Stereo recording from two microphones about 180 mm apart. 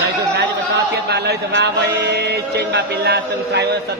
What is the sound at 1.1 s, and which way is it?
Mantra, 70° right (ahead or behind).